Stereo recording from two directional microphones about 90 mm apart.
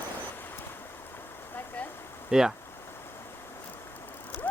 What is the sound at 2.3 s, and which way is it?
Speech, 5° right (ahead or behind).